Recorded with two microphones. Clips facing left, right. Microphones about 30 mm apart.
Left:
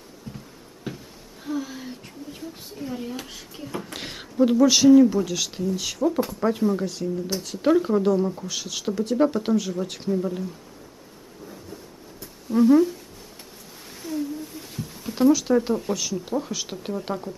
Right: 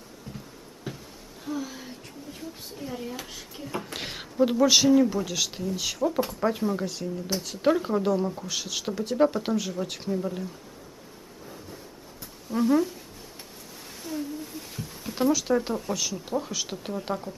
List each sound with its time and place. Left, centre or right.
1.4 s speech: centre
12.4 s speech: centre
14.0 s a sound: centre
15.9 s speech: centre